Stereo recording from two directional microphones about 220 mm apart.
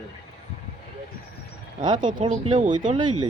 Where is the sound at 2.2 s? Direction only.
35° right (ahead or behind).